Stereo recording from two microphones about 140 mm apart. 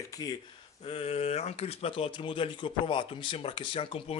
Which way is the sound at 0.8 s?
40° left (ahead or behind).